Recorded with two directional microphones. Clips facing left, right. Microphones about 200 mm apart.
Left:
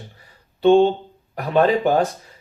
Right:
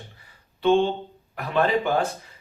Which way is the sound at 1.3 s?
40° left (ahead or behind).